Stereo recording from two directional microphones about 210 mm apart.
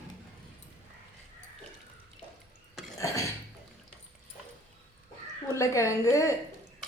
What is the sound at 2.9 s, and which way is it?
Cough, 15° left (ahead or behind).